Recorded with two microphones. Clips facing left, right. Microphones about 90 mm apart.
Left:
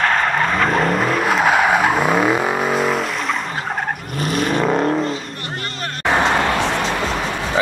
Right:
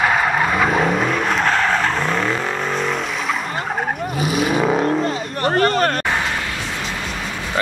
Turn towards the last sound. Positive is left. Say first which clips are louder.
# left 8 dB
turn(degrees=75)  # may be behind; listen again after turning